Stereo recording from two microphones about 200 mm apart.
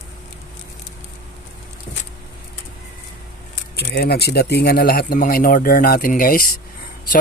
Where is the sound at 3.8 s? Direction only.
55° left (ahead or behind).